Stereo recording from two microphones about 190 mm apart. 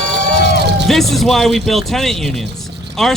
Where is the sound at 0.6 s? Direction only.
65° right (ahead or behind).